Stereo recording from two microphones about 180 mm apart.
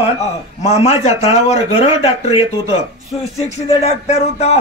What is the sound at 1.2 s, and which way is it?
A man's voice, 35° left (ahead or behind).